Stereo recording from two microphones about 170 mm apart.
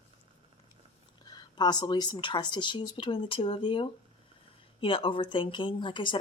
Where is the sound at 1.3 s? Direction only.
25° left (ahead or behind).